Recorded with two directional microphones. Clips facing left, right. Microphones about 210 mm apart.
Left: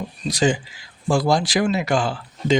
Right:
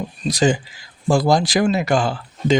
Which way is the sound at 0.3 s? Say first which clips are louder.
Right 2 dB; 40° right (ahead or behind).